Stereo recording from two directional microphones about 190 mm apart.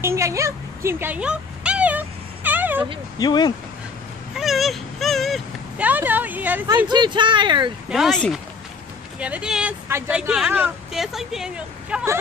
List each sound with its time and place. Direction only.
0.0 s a sound: 15° right (ahead or behind)
3.2 s speech: 20° left (ahead or behind)
4.4 s speech: centre (ahead or behind)
6.9 s speech: 25° right (ahead or behind)
7.9 s speech: centre (ahead or behind)